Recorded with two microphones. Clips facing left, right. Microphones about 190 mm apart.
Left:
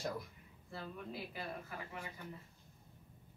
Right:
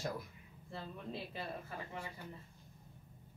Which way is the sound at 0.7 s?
25° right (ahead or behind).